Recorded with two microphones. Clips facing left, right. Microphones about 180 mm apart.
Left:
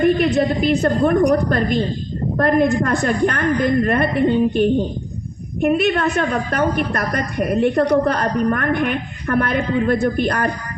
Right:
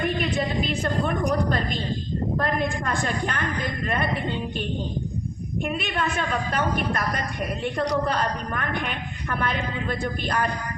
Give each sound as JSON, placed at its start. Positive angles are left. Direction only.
{"t": 0.2, "sound": "a woman's voice", "side_deg": 40}